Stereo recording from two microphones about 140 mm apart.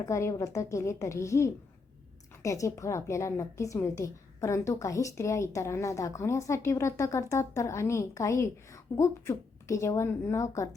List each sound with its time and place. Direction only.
0.0 s a woman's voice: 20° left (ahead or behind)